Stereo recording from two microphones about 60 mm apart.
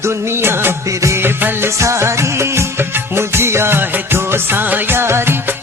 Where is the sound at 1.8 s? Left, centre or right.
Right.